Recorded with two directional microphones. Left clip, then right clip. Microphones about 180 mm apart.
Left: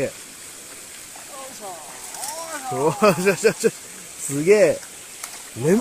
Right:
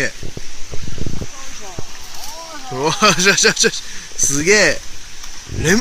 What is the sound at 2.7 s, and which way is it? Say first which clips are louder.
Speech: right 4 dB; 10° right (ahead or behind).